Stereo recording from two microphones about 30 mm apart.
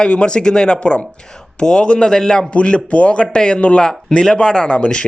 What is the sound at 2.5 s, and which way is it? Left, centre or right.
Speech, left.